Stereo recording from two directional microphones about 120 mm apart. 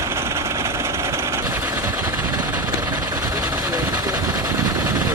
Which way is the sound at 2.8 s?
30° right (ahead or behind).